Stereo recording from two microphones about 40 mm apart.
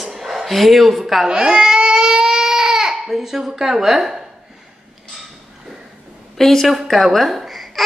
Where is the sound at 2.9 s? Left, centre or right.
Centre.